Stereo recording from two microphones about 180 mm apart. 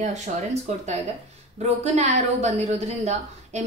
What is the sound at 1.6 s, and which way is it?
A woman's voice, 40° right (ahead or behind).